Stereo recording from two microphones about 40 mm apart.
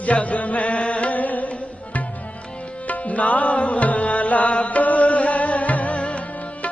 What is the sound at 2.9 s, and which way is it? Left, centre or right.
Music, left.